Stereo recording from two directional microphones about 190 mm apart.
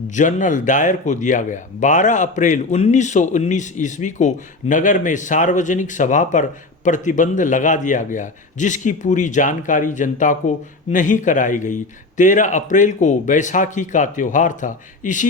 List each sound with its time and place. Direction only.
0.1 s speech: 40° left (ahead or behind)